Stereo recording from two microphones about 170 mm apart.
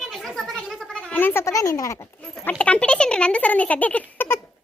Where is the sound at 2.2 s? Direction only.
10° left (ahead or behind).